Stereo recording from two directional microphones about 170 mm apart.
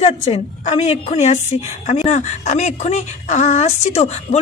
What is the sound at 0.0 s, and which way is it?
A woman's voice, 35° left (ahead or behind).